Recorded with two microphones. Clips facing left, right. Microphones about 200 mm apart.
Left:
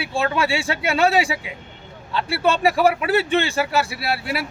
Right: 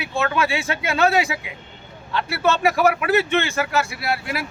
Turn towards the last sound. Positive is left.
turn(degrees=35)  # may be behind; listen again after turning